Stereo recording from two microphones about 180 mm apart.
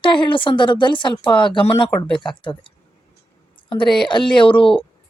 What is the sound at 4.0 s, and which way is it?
Speech, 25° left (ahead or behind).